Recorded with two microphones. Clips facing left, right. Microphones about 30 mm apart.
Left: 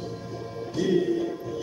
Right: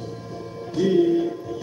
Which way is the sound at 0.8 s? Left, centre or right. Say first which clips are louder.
Right 5 dB; right.